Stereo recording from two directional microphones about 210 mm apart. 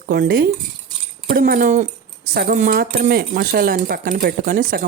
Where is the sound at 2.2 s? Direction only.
45° right (ahead or behind).